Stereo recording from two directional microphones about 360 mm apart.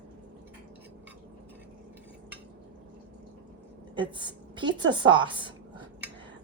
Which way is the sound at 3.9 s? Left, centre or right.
Centre.